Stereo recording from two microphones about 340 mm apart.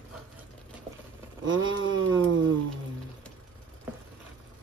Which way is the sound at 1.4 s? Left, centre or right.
Right.